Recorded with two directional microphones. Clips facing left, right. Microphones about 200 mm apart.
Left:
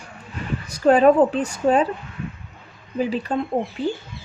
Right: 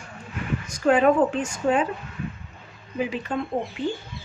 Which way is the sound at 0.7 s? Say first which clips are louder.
Left 4 dB; 35° left (ahead or behind).